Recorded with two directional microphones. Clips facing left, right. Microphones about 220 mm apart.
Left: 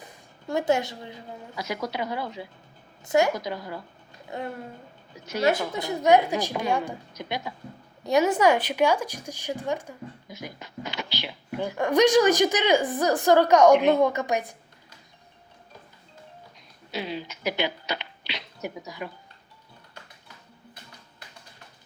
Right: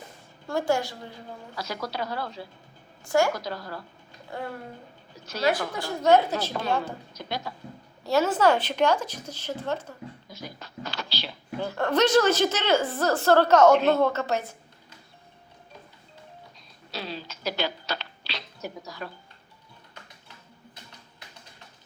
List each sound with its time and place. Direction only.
0.4 s a woman's voice: 20° left (ahead or behind)
16.9 s speech: 15° left (ahead or behind)